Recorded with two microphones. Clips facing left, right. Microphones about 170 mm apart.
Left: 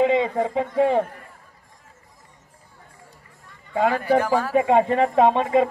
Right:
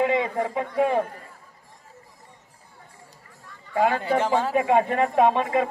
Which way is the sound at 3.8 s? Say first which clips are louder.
Left 2 dB; 25° right (ahead or behind).